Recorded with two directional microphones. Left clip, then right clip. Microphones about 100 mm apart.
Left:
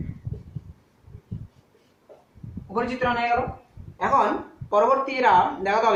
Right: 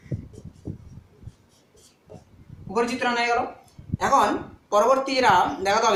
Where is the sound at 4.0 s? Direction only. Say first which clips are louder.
Right 1 dB; 60° right (ahead or behind).